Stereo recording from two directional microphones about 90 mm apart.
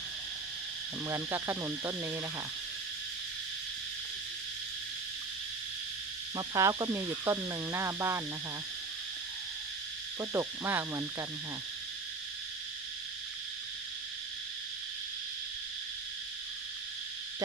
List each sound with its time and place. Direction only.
1.0 s speech: 30° right (ahead or behind)
6.3 s speech: 40° right (ahead or behind)
10.2 s speech: 35° right (ahead or behind)